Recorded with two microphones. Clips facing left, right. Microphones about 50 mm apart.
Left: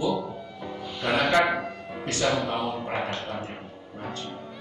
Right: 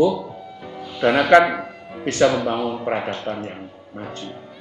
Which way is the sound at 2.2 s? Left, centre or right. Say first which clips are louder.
Right 5 dB; right.